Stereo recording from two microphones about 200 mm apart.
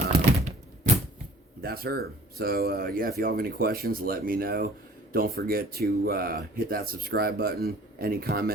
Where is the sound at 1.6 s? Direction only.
50° right (ahead or behind).